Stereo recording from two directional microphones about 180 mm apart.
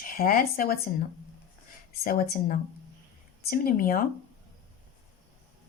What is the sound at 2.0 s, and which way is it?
Speech, 55° left (ahead or behind).